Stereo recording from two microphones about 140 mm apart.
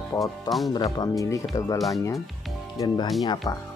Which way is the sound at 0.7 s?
30° left (ahead or behind).